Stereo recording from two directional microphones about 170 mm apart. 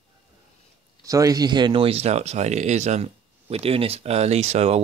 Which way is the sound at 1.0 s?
20° right (ahead or behind).